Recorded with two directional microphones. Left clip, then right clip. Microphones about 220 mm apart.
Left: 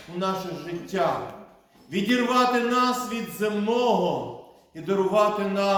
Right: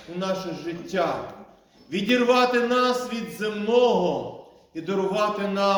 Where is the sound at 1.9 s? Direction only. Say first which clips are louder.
Right 4 dB; 15° left (ahead or behind).